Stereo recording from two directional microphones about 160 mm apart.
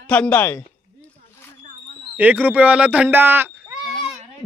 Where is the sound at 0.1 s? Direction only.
10° left (ahead or behind).